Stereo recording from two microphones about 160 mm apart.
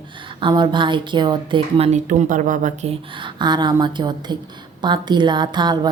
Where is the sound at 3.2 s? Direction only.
30° right (ahead or behind).